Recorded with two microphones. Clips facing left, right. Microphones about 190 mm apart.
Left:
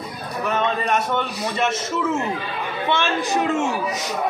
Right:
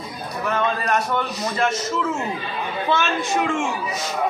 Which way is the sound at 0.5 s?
20° left (ahead or behind).